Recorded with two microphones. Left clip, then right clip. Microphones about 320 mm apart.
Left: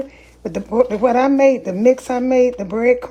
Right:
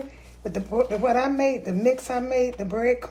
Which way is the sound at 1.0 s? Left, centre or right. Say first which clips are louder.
Left 11 dB; left.